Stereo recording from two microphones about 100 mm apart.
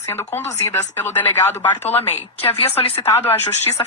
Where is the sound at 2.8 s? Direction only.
80° left.